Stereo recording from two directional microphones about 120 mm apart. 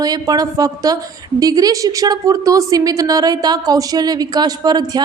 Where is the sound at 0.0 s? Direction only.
30° right (ahead or behind).